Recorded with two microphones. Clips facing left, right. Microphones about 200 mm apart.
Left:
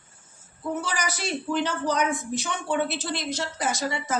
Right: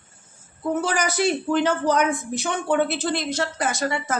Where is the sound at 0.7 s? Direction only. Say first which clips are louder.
Right 6 dB; 55° right (ahead or behind).